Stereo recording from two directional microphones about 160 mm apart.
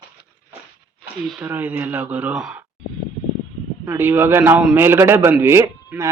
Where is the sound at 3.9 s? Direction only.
10° right (ahead or behind).